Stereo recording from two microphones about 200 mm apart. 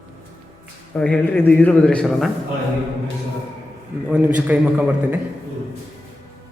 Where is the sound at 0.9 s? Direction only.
5° left (ahead or behind).